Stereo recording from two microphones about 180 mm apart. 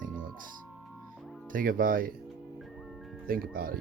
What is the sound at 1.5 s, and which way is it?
Speech, 50° right (ahead or behind).